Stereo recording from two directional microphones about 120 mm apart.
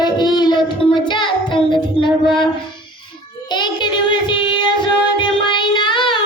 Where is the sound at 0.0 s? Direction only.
35° left (ahead or behind).